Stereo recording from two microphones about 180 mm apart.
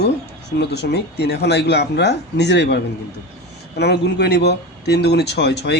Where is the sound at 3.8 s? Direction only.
65° left (ahead or behind).